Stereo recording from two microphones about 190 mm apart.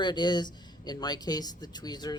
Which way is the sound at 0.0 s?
25° left (ahead or behind).